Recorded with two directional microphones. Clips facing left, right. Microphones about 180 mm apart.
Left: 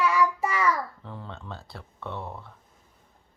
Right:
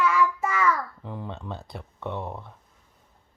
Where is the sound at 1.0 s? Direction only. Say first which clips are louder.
Right 4 dB; 15° right (ahead or behind).